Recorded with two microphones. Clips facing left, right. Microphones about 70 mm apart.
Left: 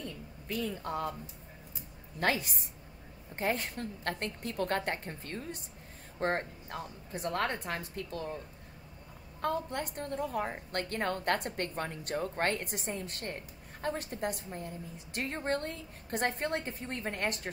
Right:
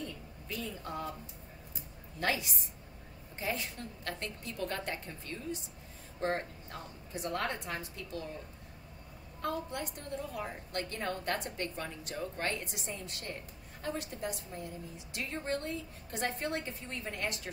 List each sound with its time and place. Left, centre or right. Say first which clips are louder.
0.5 s a woman's voice: left 5 dB; left
2.1 s a woman's voice: left 3 dB; left
9.4 s a woman's voice: left 3 dB; left